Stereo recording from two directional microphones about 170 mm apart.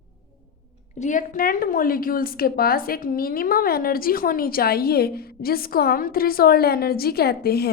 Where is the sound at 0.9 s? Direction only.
45° left (ahead or behind).